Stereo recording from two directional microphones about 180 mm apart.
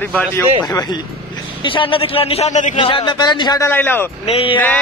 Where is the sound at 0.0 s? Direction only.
10° left (ahead or behind).